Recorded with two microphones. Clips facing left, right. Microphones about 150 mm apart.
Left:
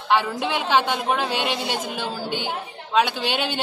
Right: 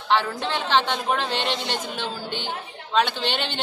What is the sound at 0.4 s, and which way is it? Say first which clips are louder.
A woman's voice: left 2 dB; 10° left (ahead or behind).